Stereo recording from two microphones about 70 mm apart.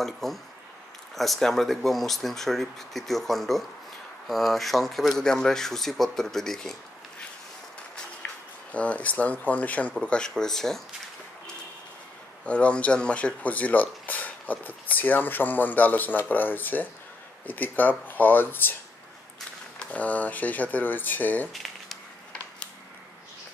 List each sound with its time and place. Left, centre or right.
0.0 s speech: centre
8.7 s speech: centre
12.4 s speech: centre
19.8 s speech: left
21.5 s a sound: centre